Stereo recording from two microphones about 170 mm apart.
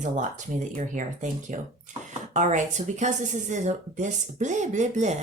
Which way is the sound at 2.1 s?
45° right (ahead or behind).